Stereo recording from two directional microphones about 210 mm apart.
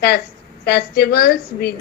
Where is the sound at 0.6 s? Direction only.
50° left (ahead or behind).